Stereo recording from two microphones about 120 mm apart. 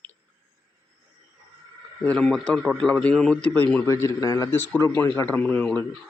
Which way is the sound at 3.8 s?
25° left (ahead or behind).